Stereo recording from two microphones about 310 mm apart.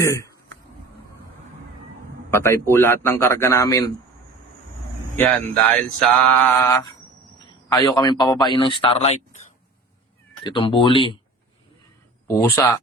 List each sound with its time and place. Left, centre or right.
0.0 s a man's voice: centre
2.3 s a man's voice: centre
5.1 s a sound: centre
7.7 s a man's voice: centre
10.4 s a man's voice: centre
12.3 s a man's voice: centre